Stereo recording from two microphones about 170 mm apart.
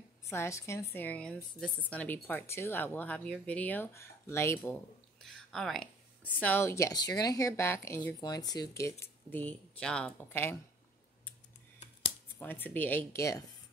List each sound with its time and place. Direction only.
0.3 s a woman's voice: 15° left (ahead or behind)
5.2 s a woman's voice: centre (ahead or behind)
12.4 s a woman's voice: 10° left (ahead or behind)